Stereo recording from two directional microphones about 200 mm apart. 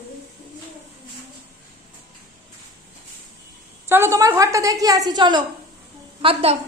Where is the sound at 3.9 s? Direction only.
10° right (ahead or behind).